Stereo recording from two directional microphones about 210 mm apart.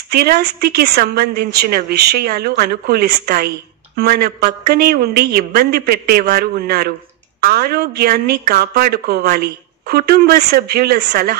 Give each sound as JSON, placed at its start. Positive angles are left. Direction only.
{"t": 0.1, "sound": "speech", "side_deg": -50}